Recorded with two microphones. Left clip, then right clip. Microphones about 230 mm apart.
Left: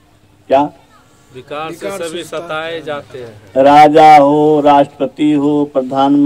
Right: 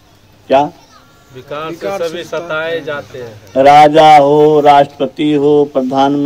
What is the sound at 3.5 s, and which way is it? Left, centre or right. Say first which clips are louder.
Speech: right 1 dB; left.